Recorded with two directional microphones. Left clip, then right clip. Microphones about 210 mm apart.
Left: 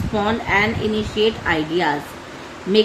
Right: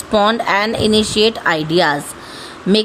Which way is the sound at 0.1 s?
60° right (ahead or behind).